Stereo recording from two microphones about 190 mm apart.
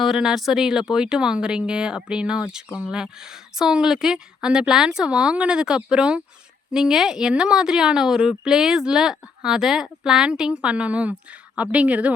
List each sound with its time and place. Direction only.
0.0 s a woman's voice: centre (ahead or behind)